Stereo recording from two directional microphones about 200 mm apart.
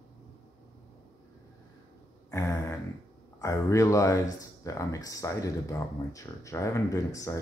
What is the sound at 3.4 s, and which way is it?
Speech, 15° left (ahead or behind).